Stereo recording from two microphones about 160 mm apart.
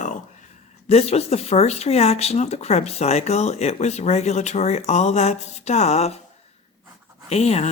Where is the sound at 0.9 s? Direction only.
40° left (ahead or behind).